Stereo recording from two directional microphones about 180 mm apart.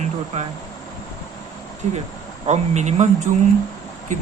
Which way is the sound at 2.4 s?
40° right (ahead or behind).